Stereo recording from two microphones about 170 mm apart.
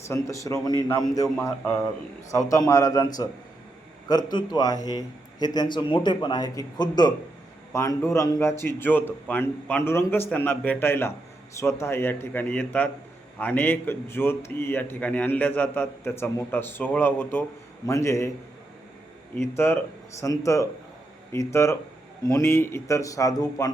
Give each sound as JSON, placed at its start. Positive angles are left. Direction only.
{"t": 0.1, "sound": "a man's voice", "side_deg": 20}
{"t": 19.4, "sound": "a man's voice", "side_deg": 15}